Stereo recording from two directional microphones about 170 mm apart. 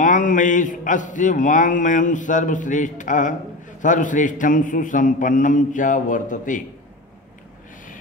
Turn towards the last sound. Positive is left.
turn(degrees=50)  # may be behind; listen again after turning